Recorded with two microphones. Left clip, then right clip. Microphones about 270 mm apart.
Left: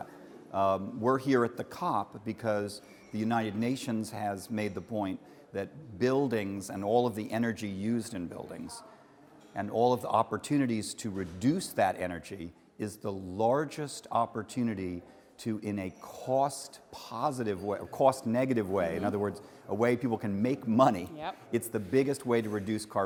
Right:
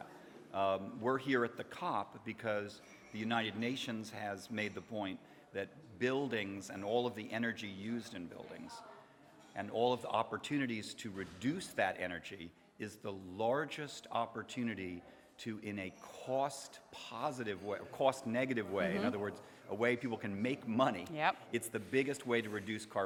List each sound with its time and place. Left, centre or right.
0.5 s a man's voice: left
4.9 s a man's voice: centre
5.5 s a man's voice: left
21.5 s a man's voice: left